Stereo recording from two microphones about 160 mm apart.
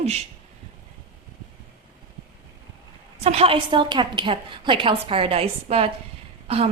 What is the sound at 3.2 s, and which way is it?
Speech, 40° right (ahead or behind).